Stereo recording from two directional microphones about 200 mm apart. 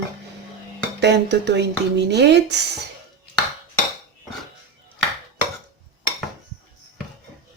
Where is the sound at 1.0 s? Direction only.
60° right (ahead or behind).